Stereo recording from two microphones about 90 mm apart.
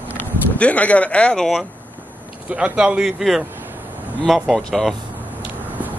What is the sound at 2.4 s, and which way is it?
Speech, 10° right (ahead or behind).